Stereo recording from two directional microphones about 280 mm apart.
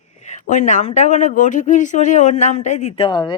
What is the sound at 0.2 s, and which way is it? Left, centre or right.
Speech, left.